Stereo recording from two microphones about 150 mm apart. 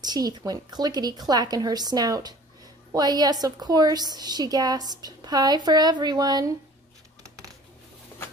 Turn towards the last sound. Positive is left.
turn(degrees=-25)  # may be behind; listen again after turning